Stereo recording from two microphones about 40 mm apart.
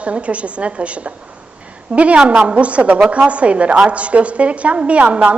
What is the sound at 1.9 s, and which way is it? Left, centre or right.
A woman's voice, right.